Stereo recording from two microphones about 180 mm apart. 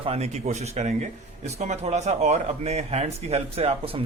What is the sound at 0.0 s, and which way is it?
Speech, 35° right (ahead or behind).